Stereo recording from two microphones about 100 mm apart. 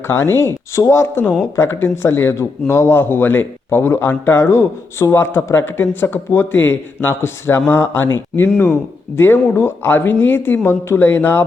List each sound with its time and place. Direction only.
0.1 s speech: 25° left (ahead or behind)